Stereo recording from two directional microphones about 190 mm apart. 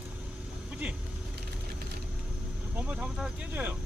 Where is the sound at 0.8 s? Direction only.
10° right (ahead or behind).